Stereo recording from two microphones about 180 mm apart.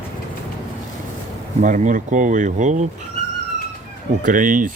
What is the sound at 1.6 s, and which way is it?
Speech, 45° right (ahead or behind).